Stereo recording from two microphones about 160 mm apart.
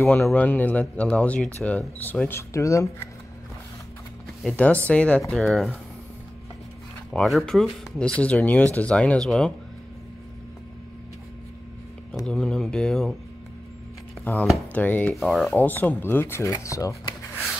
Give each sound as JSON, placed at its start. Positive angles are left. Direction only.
{"t": 0.0, "sound": "speech", "side_deg": 10}
{"t": 4.4, "sound": "speech", "side_deg": 5}
{"t": 7.1, "sound": "speech", "side_deg": 0}
{"t": 12.3, "sound": "speech", "side_deg": 5}
{"t": 14.2, "sound": "speech", "side_deg": 10}